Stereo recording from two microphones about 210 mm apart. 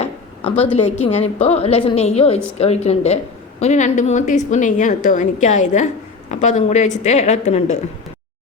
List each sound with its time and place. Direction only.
0.0 s a woman's voice: 30° left (ahead or behind)